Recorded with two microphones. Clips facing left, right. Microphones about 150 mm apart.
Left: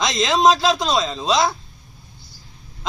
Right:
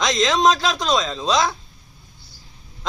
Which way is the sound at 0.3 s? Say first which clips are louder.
Left 5 dB; 25° left (ahead or behind).